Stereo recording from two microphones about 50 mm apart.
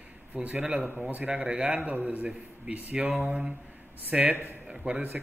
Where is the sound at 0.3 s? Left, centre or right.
Right.